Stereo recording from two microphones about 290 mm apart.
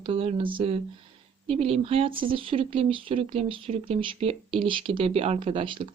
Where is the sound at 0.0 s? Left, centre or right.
Centre.